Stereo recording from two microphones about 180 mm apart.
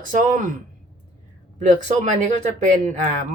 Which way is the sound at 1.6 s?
40° right (ahead or behind).